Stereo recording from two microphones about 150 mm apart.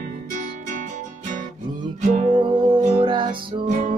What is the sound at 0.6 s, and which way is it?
Music, 60° right (ahead or behind).